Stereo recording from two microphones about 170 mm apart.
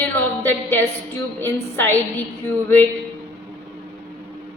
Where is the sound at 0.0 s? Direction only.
10° left (ahead or behind).